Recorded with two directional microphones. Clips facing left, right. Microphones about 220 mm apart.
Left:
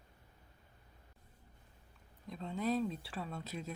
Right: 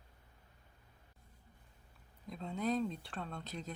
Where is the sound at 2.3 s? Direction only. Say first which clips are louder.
Even; centre (ahead or behind).